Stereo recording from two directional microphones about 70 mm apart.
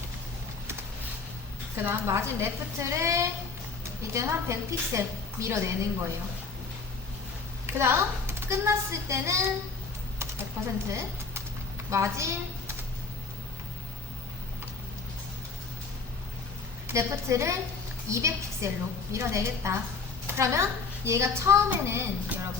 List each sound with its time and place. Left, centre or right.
1.7 s a woman's voice: right
7.7 s a woman's voice: right
10.2 s typing: right
11.9 s a woman's voice: right
16.9 s a woman's voice: right